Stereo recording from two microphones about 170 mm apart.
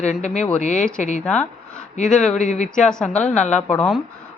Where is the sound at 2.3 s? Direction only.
45° left (ahead or behind).